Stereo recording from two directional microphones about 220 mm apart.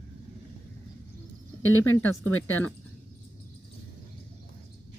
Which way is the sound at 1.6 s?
65° left (ahead or behind).